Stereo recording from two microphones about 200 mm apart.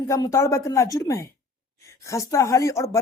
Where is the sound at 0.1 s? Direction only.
15° left (ahead or behind).